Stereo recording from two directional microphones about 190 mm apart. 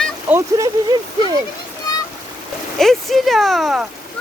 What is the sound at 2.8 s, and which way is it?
Speech, centre (ahead or behind).